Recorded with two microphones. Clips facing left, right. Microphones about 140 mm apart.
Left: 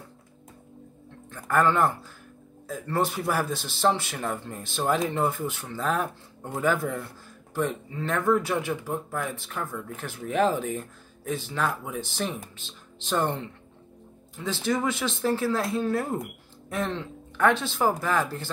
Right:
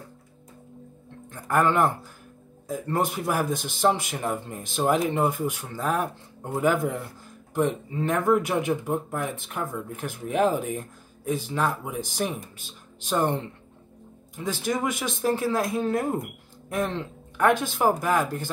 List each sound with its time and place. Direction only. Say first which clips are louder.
1.3 s speech: right 1 dB; 15° right (ahead or behind)